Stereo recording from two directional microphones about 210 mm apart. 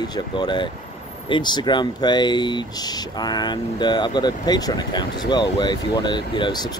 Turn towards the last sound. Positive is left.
turn(degrees=20)  # may be behind; listen again after turning